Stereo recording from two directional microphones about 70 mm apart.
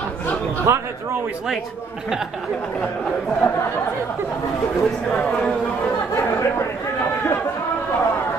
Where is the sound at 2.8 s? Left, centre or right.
Centre.